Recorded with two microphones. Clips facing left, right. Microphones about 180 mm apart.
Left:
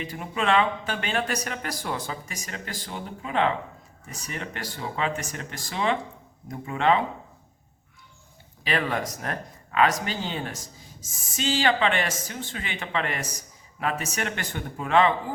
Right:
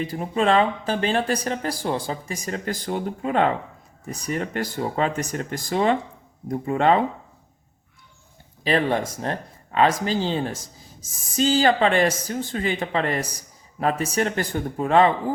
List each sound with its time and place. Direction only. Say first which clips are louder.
0.0 s speech: right 6 dB; 35° right (ahead or behind)
2.6 s speech: right 10 dB; 45° right (ahead or behind)
8.6 s speech: right 6 dB; 30° right (ahead or behind)